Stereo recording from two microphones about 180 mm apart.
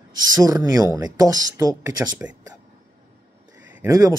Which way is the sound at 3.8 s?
20° right (ahead or behind).